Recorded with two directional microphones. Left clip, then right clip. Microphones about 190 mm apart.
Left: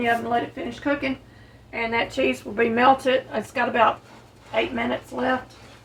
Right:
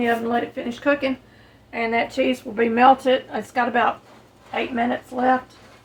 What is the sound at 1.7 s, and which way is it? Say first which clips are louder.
A woman's voice: right 2 dB; 40° right (ahead or behind).